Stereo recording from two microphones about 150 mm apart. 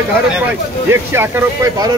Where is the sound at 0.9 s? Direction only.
15° right (ahead or behind).